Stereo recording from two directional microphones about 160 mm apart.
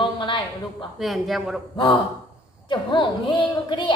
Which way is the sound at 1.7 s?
30° left (ahead or behind).